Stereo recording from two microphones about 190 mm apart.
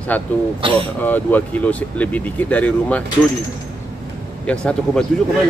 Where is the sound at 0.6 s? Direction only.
25° right (ahead or behind).